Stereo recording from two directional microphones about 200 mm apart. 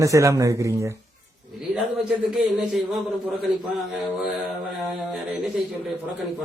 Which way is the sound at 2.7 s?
Centre (ahead or behind).